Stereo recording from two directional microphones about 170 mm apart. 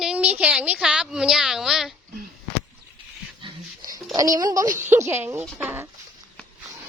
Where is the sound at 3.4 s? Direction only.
25° right (ahead or behind).